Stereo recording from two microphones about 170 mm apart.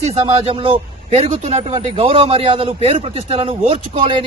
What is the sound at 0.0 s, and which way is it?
A man's voice, 35° right (ahead or behind).